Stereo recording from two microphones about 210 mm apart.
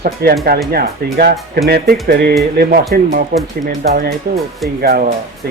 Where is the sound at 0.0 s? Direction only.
45° right (ahead or behind).